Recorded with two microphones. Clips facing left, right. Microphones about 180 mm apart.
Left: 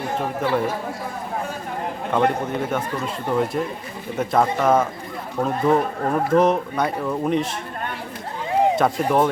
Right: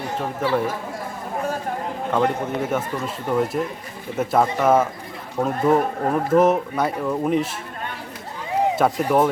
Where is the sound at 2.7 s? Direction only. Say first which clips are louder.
Even; 5° right (ahead or behind).